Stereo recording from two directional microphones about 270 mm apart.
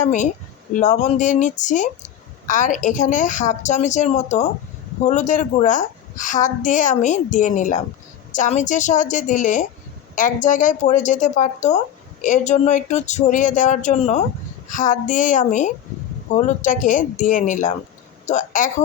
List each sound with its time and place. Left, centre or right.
0.0 s a child's voice: left